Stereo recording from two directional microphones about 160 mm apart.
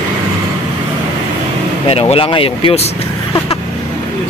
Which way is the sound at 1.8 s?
40° left (ahead or behind).